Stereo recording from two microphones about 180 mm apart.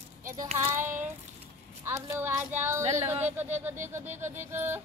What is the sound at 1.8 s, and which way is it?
Speech, 15° right (ahead or behind).